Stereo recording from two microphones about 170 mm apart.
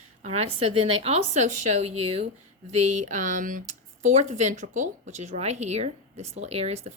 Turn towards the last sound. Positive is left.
turn(degrees=-40)  # may be behind; listen again after turning